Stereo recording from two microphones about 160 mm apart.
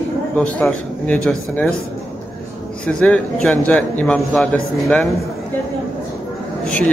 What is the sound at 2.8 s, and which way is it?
Speech, 10° left (ahead or behind).